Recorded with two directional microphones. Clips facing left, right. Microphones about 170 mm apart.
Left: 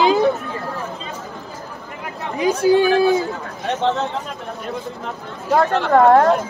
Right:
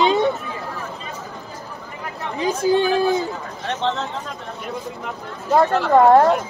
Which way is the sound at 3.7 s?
15° left (ahead or behind).